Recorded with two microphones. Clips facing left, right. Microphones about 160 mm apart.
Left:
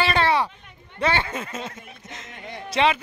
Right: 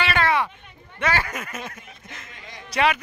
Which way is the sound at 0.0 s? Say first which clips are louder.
Left 1 dB; 30° left (ahead or behind).